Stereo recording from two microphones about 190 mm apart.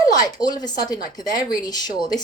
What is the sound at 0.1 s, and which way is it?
A woman's voice, 20° left (ahead or behind).